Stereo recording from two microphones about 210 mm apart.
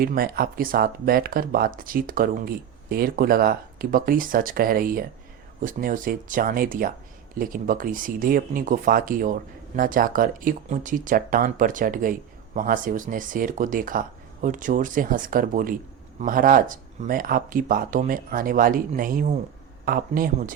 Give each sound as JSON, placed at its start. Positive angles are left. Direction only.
{"t": 0.0, "sound": "speech", "side_deg": -45}